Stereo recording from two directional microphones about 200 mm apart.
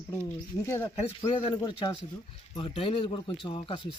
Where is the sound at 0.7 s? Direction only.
15° left (ahead or behind).